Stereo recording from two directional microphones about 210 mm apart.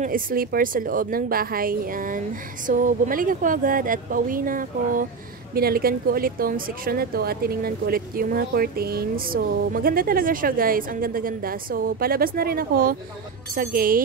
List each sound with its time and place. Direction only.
0.0 s a woman's voice: 40° right (ahead or behind)